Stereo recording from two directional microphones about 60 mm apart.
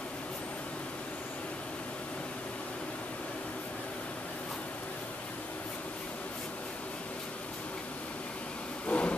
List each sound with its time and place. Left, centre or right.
8.8 s vehicle: left